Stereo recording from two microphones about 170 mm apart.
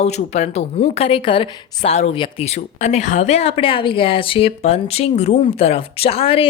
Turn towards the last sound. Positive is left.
turn(degrees=35)  # may be behind; listen again after turning